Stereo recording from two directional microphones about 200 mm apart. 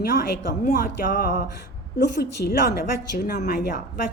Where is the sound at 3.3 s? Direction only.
50° left (ahead or behind).